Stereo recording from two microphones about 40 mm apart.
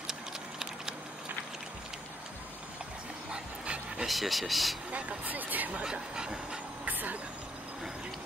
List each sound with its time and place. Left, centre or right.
3.3 s dog: right
4.1 s speech: centre
4.9 s vehicle: right
5.9 s dog: right
6.8 s vehicle: right